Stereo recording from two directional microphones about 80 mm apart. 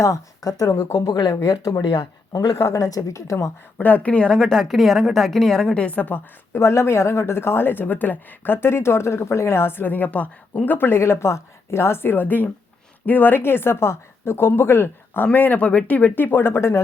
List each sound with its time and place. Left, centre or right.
0.0 s speech: left
0.9 s speech: left
3.8 s a woman's voice: left